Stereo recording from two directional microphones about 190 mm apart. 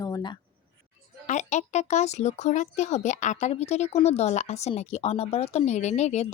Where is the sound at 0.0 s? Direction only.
20° left (ahead or behind).